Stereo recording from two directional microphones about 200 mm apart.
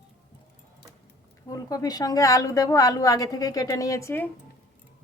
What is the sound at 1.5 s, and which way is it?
A woman's voice, 20° left (ahead or behind).